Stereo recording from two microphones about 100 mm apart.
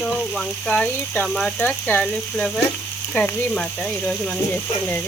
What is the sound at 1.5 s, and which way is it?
Speech, 15° left (ahead or behind).